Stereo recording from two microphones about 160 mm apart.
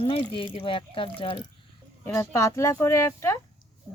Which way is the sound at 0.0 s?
35° left (ahead or behind).